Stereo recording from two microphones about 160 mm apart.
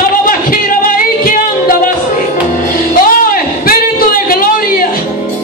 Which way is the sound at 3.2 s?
65° left (ahead or behind).